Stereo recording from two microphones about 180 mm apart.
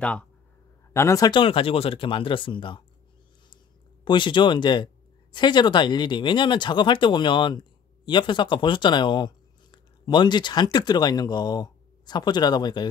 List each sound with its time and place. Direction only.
0.9 s speech: 15° left (ahead or behind)
4.0 s speech: 25° left (ahead or behind)